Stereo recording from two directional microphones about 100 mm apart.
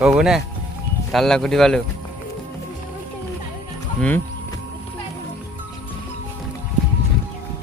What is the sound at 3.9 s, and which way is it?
Speech, 15° left (ahead or behind).